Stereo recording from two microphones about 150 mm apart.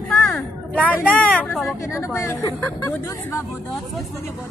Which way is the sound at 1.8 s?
20° left (ahead or behind).